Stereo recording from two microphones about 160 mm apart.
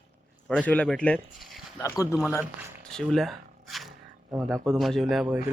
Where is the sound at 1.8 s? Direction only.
20° left (ahead or behind).